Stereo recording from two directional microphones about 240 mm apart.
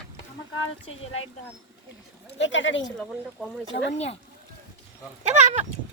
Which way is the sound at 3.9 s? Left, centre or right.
Left.